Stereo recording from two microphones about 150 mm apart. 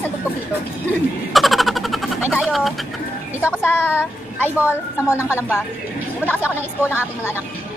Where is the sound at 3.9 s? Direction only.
10° left (ahead or behind).